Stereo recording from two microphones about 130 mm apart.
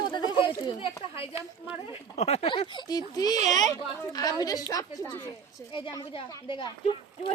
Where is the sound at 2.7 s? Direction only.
30° left (ahead or behind).